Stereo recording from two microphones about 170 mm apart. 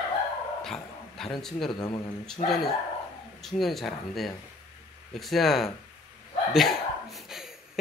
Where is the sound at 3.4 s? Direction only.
Centre (ahead or behind).